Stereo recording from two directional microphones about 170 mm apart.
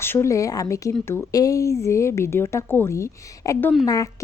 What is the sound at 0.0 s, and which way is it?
A woman's voice, 15° left (ahead or behind).